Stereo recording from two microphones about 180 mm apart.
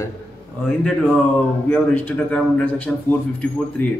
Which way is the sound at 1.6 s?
10° left (ahead or behind).